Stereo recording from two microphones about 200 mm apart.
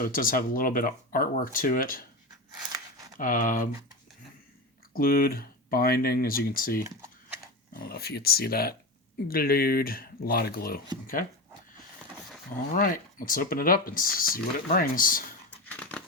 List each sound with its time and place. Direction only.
0.0 s speech: 45° left (ahead or behind)
3.2 s speech: 45° left (ahead or behind)
4.9 s speech: 45° left (ahead or behind)
12.7 s speech: 45° left (ahead or behind)
15.4 s dog: 5° left (ahead or behind)